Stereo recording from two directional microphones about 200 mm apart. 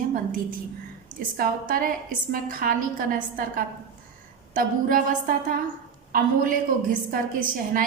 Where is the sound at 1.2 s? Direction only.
45° right (ahead or behind).